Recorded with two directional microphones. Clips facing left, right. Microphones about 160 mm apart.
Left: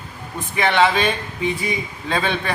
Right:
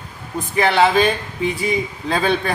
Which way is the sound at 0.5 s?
35° right (ahead or behind).